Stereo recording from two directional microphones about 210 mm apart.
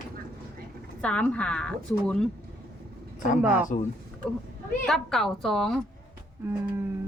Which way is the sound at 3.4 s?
10° right (ahead or behind).